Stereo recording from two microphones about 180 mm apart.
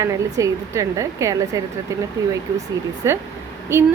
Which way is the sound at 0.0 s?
15° right (ahead or behind).